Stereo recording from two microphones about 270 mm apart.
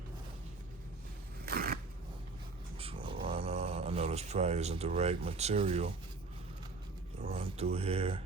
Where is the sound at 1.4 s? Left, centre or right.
Right.